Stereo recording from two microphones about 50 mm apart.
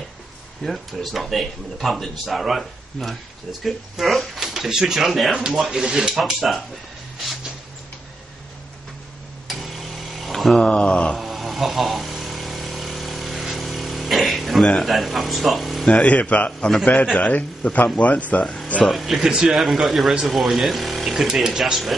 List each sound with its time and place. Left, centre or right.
0.7 s speech: centre
9.5 s tick-tock: centre
10.6 s speech: left
11.1 s vehicle: centre
14.8 s speech: centre
16.0 s speech: left
18.9 s speech: centre